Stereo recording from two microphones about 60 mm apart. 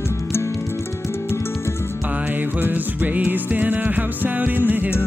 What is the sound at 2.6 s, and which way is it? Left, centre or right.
Music, right.